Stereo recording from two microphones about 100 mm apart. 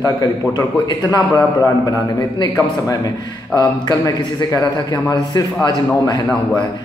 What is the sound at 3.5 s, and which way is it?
A man's voice, 40° left (ahead or behind).